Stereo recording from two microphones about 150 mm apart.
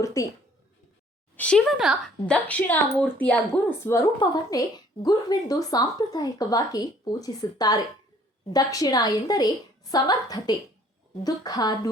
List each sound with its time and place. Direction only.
0.0 s a woman's voice: 20° left (ahead or behind)
1.4 s a woman's voice: 5° left (ahead or behind)
2.2 s a woman's voice: 10° left (ahead or behind); by 11.9 s 25° left (ahead or behind)